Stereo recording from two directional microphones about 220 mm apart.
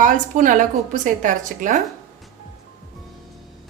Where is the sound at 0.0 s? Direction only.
35° right (ahead or behind).